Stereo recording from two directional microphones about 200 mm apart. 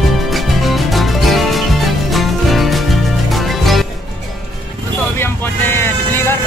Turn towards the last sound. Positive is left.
turn(degrees=10)  # may be behind; listen again after turning